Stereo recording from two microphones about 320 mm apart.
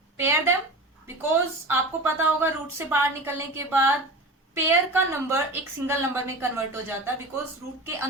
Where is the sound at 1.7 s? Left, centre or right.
Centre.